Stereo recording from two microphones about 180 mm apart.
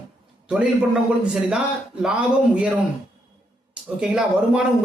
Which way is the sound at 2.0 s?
5° right (ahead or behind).